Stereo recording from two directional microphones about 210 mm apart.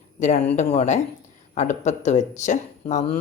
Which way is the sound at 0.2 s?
40° left (ahead or behind).